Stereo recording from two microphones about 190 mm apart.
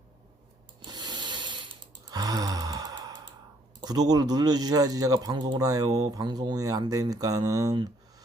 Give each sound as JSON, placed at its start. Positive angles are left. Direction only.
{"t": 0.8, "sound": "a sound", "side_deg": -20}
{"t": 2.0, "sound": "sigh", "side_deg": -20}
{"t": 3.8, "sound": "speech", "side_deg": -20}